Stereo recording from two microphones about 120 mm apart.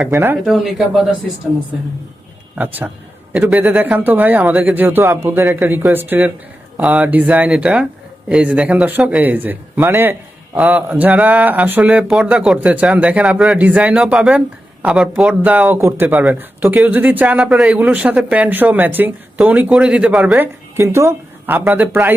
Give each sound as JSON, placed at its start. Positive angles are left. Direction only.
{"t": 0.1, "sound": "speech", "side_deg": -20}
{"t": 0.4, "sound": "a man's voice", "side_deg": 0}
{"t": 3.3, "sound": "speech", "side_deg": -10}